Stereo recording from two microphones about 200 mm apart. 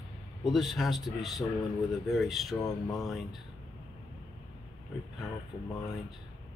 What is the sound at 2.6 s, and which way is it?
Speech, 15° left (ahead or behind).